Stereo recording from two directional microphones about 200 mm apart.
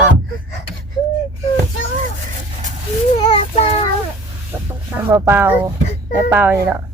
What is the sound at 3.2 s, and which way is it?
Child singing, 30° left (ahead or behind).